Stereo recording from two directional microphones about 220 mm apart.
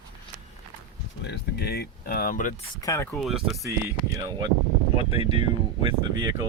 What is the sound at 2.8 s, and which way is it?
Speech, 15° left (ahead or behind).